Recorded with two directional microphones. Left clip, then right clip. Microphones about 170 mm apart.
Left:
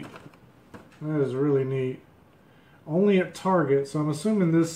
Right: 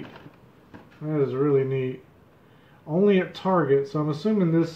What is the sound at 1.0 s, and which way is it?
Speech, centre (ahead or behind).